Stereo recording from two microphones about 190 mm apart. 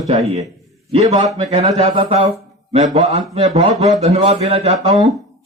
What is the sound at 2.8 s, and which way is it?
A man's voice, 40° right (ahead or behind).